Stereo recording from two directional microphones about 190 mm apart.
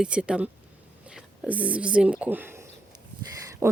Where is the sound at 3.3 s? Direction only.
15° right (ahead or behind).